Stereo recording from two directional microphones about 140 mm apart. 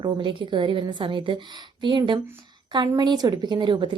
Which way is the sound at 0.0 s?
35° right (ahead or behind).